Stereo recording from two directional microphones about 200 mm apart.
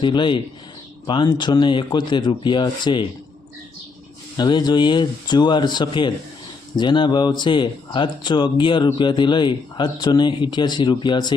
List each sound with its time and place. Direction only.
0.0 s speech: 25° left (ahead or behind)
4.4 s speech: 20° left (ahead or behind)